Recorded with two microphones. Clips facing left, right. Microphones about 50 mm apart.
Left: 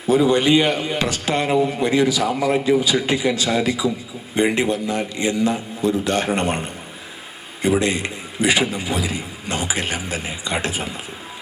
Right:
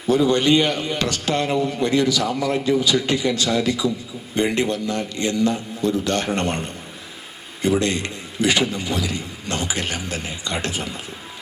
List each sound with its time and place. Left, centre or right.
0.1 s a man's voice: centre